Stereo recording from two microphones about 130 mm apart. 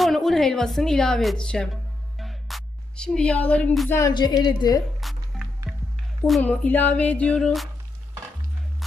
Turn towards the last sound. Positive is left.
turn(degrees=5)  # may be behind; listen again after turning